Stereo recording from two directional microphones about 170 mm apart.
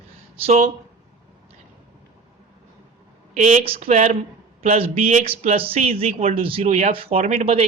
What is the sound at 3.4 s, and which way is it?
Speech, 40° right (ahead or behind).